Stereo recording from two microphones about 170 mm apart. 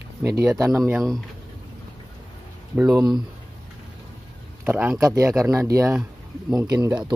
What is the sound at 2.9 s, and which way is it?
Speech, 25° right (ahead or behind).